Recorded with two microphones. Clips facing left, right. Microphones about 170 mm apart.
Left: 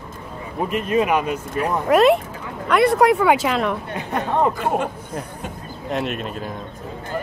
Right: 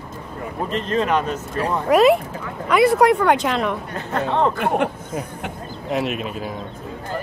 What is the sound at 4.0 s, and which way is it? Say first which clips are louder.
Speech: even; 15° left (ahead or behind).